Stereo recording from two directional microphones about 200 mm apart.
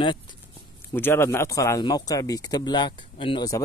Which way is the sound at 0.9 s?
10° left (ahead or behind).